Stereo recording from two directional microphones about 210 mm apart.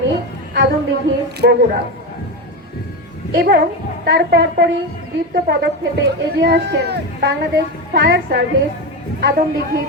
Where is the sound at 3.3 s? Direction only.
45° right (ahead or behind).